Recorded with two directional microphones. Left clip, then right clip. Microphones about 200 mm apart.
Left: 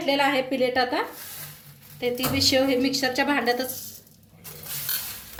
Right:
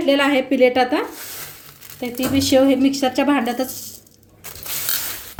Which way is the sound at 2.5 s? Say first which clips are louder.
Right 7 dB; 45° right (ahead or behind).